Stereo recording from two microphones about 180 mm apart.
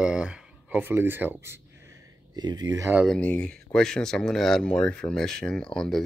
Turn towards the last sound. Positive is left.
turn(degrees=5)  # may be behind; listen again after turning